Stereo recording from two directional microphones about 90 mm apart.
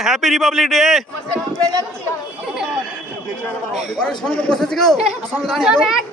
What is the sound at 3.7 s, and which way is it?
A man's voice, 10° left (ahead or behind).